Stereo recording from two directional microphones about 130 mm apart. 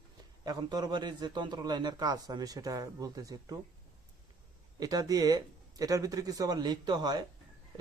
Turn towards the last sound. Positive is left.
turn(degrees=-35)  # may be behind; listen again after turning